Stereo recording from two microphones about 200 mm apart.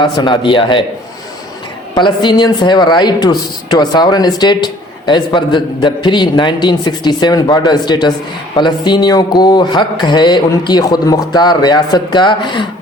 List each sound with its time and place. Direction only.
0.0 s speech: 25° left (ahead or behind)
2.0 s speech: 20° left (ahead or behind)